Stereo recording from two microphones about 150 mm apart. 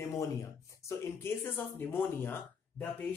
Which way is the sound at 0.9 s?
15° left (ahead or behind).